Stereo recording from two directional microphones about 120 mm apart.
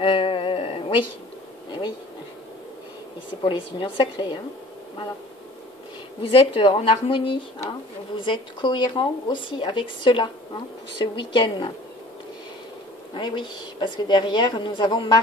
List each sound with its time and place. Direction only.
0.0 s a sound: 45° left (ahead or behind)
3.4 s speech: 45° left (ahead or behind)
6.2 s speech: 50° left (ahead or behind)
13.1 s speech: 40° left (ahead or behind)